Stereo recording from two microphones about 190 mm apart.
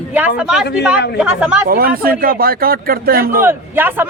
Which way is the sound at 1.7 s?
50° right (ahead or behind).